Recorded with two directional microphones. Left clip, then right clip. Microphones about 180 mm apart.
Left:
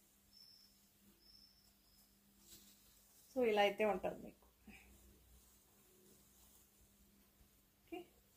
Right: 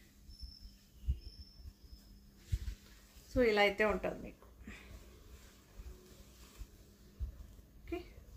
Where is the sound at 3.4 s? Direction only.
25° right (ahead or behind).